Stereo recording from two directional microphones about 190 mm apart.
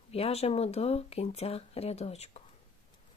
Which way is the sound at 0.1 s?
30° left (ahead or behind).